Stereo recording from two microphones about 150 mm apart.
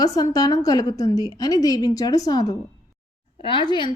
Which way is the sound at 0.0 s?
25° left (ahead or behind).